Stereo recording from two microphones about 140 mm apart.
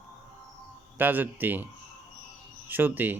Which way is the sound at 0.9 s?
15° right (ahead or behind).